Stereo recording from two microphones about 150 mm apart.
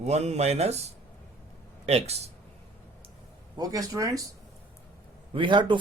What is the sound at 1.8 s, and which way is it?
Speech, 45° right (ahead or behind).